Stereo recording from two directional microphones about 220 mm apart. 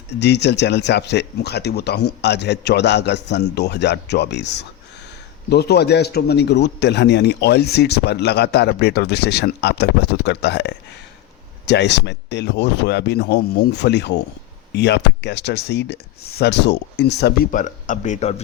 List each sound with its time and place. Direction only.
0.1 s a man's voice: 50° left (ahead or behind); by 18.3 s 30° left (ahead or behind)